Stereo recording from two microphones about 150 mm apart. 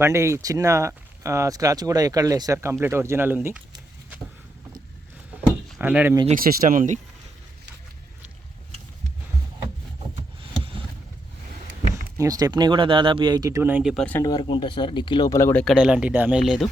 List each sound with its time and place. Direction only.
0.0 s speech: 20° right (ahead or behind)
5.8 s speech: 10° right (ahead or behind)
6.4 s speech: 75° right (ahead or behind); by 7.0 s 60° right (ahead or behind)
12.1 s speech: 20° right (ahead or behind)
13.9 s speech: 5° left (ahead or behind)
14.2 s speech: 25° left (ahead or behind)
15.4 s speech: 15° left (ahead or behind)
15.6 s speech: 5° right (ahead or behind)